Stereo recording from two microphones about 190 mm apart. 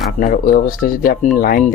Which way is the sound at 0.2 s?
45° left (ahead or behind).